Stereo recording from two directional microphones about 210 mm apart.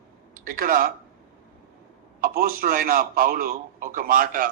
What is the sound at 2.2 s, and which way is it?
A man's voice, 45° right (ahead or behind).